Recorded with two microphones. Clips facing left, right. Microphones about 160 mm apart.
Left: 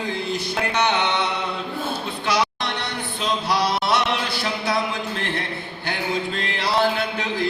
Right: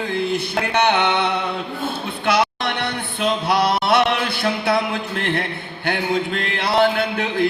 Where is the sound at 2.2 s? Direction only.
60° right (ahead or behind).